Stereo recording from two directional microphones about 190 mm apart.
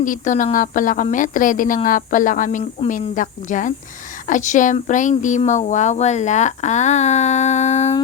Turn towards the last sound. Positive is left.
turn(degrees=35)  # may be behind; listen again after turning